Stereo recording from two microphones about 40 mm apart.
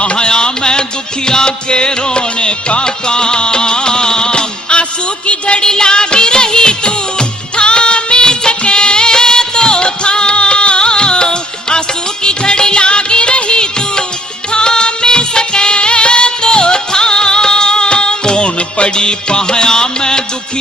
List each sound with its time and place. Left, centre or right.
0.0 s music: left
12.2 s music of bollywood: left
14.5 s music: left